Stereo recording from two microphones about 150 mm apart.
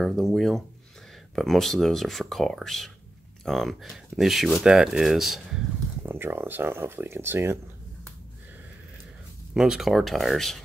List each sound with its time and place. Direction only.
0.0 s speech: centre (ahead or behind)
6.0 s speech: 15° right (ahead or behind)
9.5 s speech: 5° right (ahead or behind)